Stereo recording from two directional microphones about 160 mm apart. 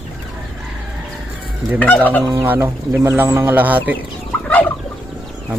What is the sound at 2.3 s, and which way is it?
Speech, 15° right (ahead or behind).